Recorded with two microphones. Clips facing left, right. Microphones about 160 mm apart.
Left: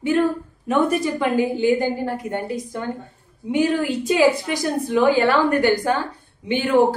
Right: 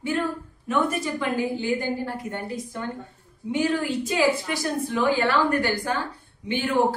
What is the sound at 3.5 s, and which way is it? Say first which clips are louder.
A woman's voice: left 4 dB; 15° left (ahead or behind).